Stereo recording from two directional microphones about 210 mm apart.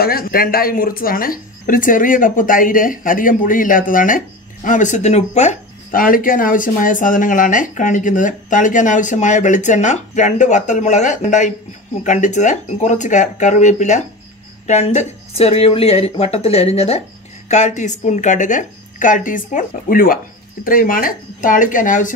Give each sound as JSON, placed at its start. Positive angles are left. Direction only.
{"t": 0.0, "sound": "speech", "side_deg": 45}